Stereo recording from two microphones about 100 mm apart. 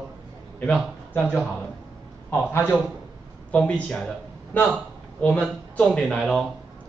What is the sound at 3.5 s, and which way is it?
A man's voice, 10° left (ahead or behind).